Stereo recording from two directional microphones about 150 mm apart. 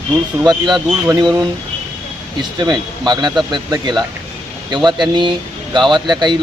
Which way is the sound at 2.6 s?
30° right (ahead or behind).